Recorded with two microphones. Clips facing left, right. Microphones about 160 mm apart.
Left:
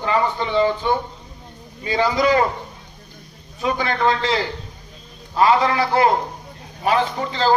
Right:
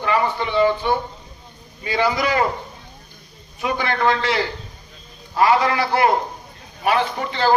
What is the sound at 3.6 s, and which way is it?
Speech, 25° left (ahead or behind).